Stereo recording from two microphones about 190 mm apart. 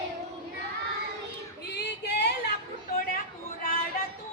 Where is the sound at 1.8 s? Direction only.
60° left (ahead or behind).